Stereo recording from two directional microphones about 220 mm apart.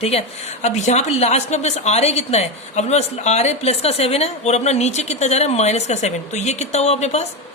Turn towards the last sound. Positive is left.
turn(degrees=30)  # may be behind; listen again after turning